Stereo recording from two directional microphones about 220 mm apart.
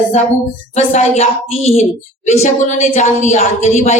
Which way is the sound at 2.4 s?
30° left (ahead or behind).